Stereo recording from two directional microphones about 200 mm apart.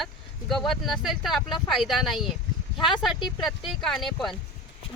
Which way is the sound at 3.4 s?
Centre (ahead or behind).